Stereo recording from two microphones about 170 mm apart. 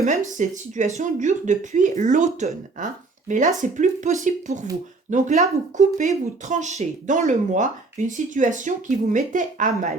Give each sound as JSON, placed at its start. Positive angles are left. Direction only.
{"t": 0.0, "sound": "speech", "side_deg": -45}